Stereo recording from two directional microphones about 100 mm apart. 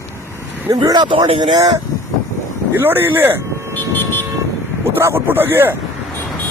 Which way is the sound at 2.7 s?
20° right (ahead or behind).